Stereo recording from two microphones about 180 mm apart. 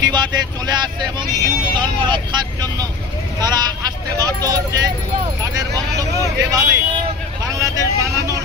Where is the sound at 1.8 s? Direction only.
25° right (ahead or behind).